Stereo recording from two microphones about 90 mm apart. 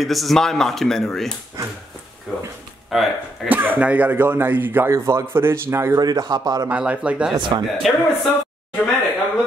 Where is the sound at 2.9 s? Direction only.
5° right (ahead or behind).